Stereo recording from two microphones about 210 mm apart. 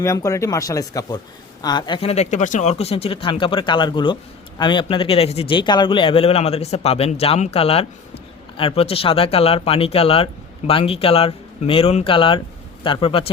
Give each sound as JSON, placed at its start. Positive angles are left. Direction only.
{"t": 0.0, "sound": "speech", "side_deg": 15}